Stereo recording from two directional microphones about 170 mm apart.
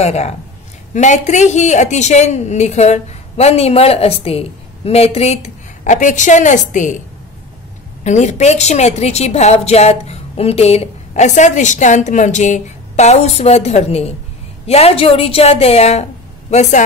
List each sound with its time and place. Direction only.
0.0 s a woman's voice: 40° left (ahead or behind)
8.0 s a woman's voice: 45° left (ahead or behind)